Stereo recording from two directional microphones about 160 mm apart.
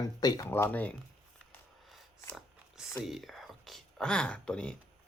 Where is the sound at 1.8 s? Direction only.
Centre (ahead or behind).